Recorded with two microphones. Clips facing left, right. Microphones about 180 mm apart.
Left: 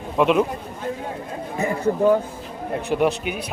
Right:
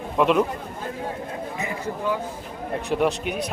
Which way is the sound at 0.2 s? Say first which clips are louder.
Left 2 dB; centre (ahead or behind).